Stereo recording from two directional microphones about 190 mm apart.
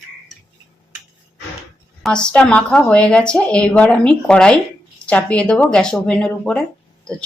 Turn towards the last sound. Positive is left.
turn(degrees=5)  # may be behind; listen again after turning